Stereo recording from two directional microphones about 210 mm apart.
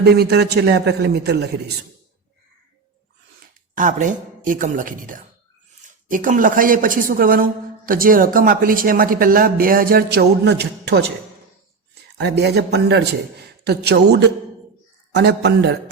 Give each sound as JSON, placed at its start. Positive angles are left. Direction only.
{"t": 0.0, "sound": "speech", "side_deg": -50}
{"t": 3.8, "sound": "speech", "side_deg": -40}
{"t": 12.1, "sound": "speech", "side_deg": -50}